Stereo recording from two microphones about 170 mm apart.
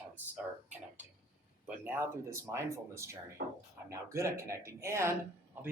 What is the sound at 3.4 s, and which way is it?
Speech, 60° right (ahead or behind).